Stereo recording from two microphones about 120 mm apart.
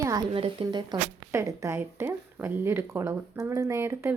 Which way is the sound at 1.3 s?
25° right (ahead or behind).